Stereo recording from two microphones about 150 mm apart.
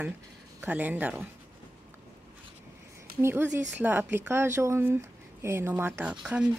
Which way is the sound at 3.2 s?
15° right (ahead or behind).